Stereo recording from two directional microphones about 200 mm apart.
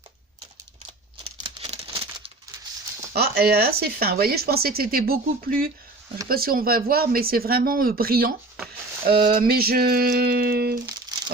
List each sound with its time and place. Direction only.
1.2 s crumpling: 30° right (ahead or behind)
3.1 s speech: 50° right (ahead or behind)